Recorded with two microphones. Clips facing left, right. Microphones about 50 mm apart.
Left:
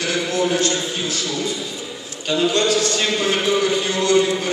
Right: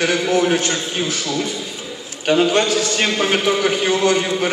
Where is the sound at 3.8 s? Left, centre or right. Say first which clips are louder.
Right 2 dB; right.